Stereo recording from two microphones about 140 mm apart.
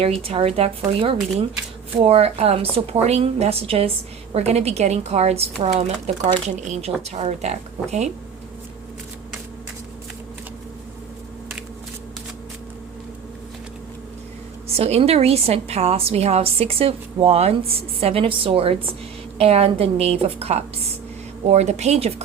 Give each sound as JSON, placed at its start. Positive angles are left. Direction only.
{"t": 0.2, "sound": "a woman's voice", "side_deg": -40}
{"t": 2.0, "sound": "a woman's voice", "side_deg": -45}
{"t": 14.7, "sound": "a woman's voice", "side_deg": -45}